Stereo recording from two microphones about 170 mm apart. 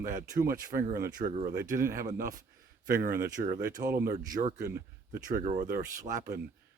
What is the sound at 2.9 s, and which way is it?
Speech, 60° right (ahead or behind).